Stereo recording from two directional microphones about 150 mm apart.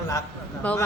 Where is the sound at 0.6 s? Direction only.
10° left (ahead or behind).